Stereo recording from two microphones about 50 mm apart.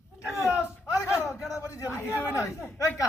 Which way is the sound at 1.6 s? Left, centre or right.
Left.